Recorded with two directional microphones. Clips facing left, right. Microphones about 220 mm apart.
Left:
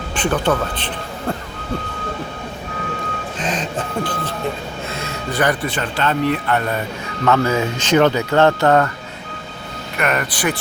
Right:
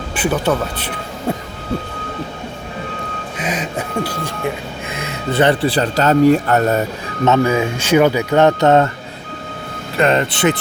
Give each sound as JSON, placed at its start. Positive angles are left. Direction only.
{"t": 0.2, "sound": "speech", "side_deg": -10}
{"t": 3.3, "sound": "speech", "side_deg": -10}
{"t": 7.3, "sound": "speech", "side_deg": -15}
{"t": 10.0, "sound": "speech", "side_deg": -25}